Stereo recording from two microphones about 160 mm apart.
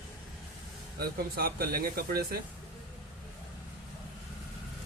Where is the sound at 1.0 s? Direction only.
70° right (ahead or behind).